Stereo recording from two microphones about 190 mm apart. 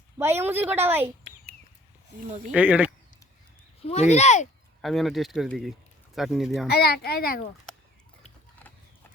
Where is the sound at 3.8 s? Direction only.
35° left (ahead or behind).